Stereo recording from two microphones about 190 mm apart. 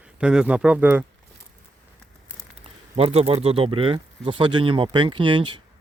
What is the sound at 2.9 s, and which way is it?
Speech, 30° right (ahead or behind).